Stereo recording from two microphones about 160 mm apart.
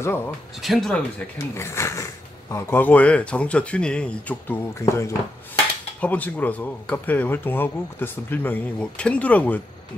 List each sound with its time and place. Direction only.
0.6 s speech: centre (ahead or behind)
1.5 s speech: 15° left (ahead or behind)